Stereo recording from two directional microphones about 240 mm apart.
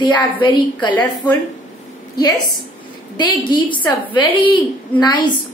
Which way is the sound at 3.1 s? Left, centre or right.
Centre.